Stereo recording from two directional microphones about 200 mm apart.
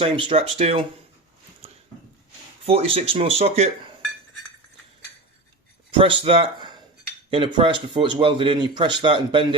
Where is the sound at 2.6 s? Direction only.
30° right (ahead or behind).